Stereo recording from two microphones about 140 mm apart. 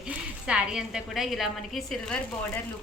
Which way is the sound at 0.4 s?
5° right (ahead or behind).